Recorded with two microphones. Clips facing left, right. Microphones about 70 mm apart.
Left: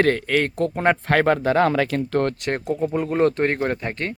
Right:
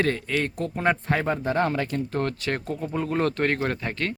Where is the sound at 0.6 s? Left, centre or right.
Left.